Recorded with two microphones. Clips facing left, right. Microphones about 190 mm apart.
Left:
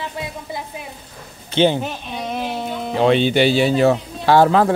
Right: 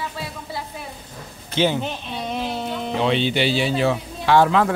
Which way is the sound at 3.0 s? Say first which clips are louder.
Left 6 dB; 50° left (ahead or behind).